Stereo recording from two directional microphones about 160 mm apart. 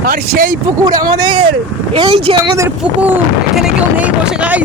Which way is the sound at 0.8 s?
25° right (ahead or behind).